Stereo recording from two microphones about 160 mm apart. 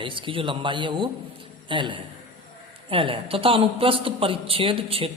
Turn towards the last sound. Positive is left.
turn(degrees=-35)  # may be behind; listen again after turning